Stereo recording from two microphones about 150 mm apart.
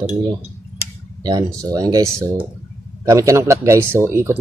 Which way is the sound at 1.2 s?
25° right (ahead or behind).